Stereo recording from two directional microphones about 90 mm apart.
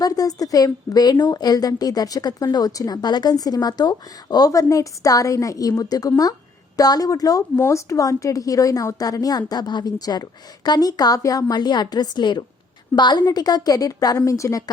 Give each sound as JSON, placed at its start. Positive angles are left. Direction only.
{"t": 0.0, "sound": "a woman's voice", "side_deg": 40}